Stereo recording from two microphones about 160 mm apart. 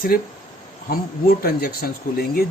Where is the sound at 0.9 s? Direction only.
65° left (ahead or behind).